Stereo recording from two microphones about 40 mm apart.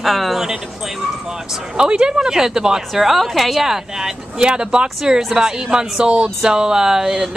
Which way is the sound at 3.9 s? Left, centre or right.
Centre.